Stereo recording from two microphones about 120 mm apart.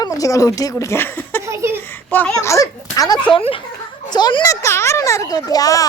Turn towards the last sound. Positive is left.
turn(degrees=30)  # may be behind; listen again after turning